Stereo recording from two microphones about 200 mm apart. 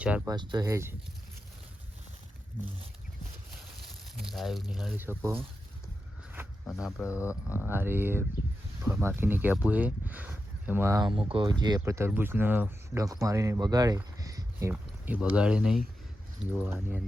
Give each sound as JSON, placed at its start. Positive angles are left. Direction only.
{"t": 0.3, "sound": "speech", "side_deg": -20}
{"t": 3.5, "sound": "speech", "side_deg": 0}
{"t": 6.7, "sound": "speech", "side_deg": 0}